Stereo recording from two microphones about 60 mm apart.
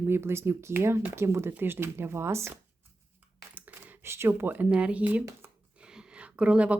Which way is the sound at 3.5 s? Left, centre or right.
Right.